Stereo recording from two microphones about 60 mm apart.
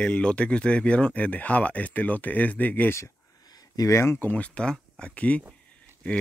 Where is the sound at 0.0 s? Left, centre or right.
Centre.